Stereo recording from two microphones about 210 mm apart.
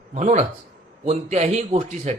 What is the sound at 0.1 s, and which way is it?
Speech, 35° right (ahead or behind).